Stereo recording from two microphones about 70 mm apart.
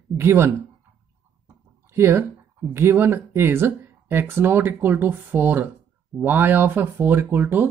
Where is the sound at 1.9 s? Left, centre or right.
Right.